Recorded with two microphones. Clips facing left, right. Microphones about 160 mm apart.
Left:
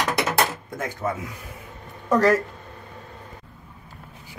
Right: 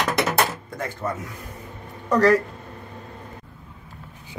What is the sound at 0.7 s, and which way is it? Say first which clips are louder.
Speech: left 1 dB; 5° left (ahead or behind).